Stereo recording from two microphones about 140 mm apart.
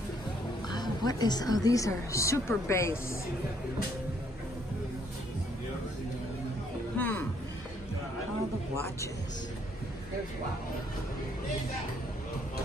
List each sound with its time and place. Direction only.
0.7 s a woman's voice: 30° left (ahead or behind)
7.0 s music: 15° left (ahead or behind)